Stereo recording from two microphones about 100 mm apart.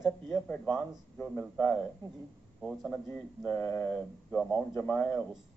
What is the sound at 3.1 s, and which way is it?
Speech, 20° left (ahead or behind).